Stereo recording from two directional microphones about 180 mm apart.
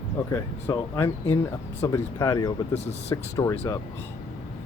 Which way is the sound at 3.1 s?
15° left (ahead or behind).